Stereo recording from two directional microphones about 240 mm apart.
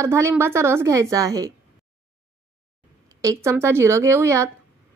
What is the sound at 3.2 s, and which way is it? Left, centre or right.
A woman's voice, centre.